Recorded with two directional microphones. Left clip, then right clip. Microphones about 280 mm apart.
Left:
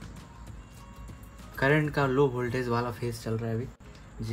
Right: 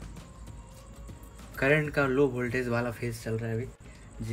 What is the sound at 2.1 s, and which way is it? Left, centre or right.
Speech, centre.